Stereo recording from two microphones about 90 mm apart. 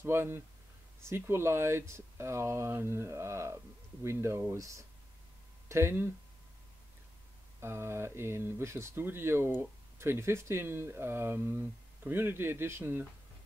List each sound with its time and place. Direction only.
0.0 s speech: 25° right (ahead or behind)
7.6 s speech: 30° right (ahead or behind)